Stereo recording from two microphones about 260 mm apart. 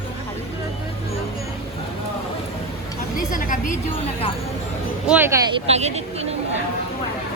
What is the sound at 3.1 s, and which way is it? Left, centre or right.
Speech, left.